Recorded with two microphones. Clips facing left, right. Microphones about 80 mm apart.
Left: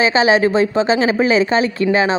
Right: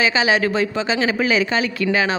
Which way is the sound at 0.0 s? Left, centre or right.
Left.